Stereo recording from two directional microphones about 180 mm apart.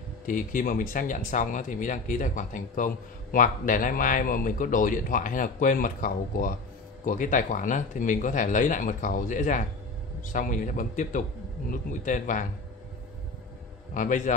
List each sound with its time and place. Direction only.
0.3 s speech: 45° left (ahead or behind)
13.9 s speech: 45° left (ahead or behind)